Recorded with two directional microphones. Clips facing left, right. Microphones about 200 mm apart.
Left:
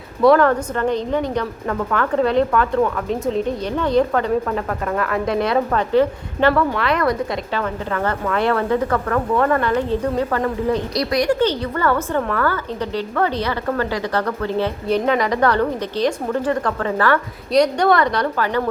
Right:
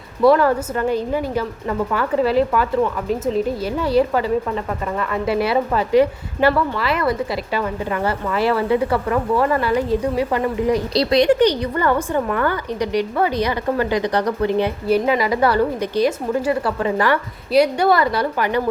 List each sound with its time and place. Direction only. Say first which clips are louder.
0.2 s a woman's voice: left 1 dB; 5° right (ahead or behind)
10.9 s a woman's voice: right 6 dB; 25° right (ahead or behind)